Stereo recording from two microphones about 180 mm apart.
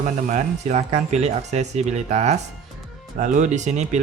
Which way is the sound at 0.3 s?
40° right (ahead or behind).